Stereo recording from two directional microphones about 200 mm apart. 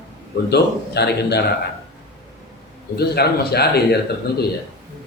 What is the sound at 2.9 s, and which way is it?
A man's voice, 55° left (ahead or behind).